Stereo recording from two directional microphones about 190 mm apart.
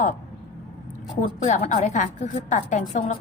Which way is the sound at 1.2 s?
40° left (ahead or behind).